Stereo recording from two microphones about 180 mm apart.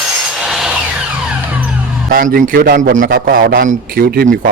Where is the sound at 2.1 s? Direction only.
50° right (ahead or behind).